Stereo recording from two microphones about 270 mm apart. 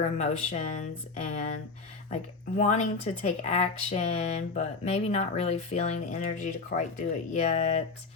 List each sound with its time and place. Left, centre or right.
0.0 s speech: left
2.6 s speech: left